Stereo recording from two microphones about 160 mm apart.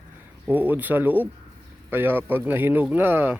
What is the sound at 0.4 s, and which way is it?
Speech, 10° right (ahead or behind).